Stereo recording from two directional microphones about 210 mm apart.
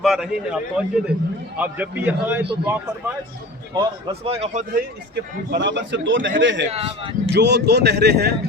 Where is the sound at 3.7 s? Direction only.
30° right (ahead or behind).